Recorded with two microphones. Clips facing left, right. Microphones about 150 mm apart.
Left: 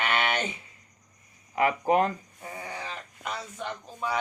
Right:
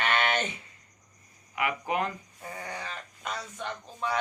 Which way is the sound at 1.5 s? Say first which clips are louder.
Left 7 dB; 35° left (ahead or behind).